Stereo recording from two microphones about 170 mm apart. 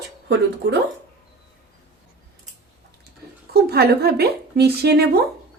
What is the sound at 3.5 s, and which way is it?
Speech, 65° right (ahead or behind).